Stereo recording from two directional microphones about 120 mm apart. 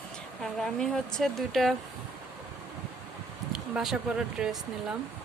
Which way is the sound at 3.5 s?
5° right (ahead or behind).